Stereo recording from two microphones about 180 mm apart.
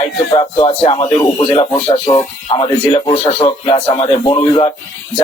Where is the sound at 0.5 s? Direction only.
30° left (ahead or behind).